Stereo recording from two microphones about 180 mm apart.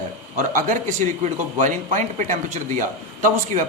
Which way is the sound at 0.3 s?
45° right (ahead or behind).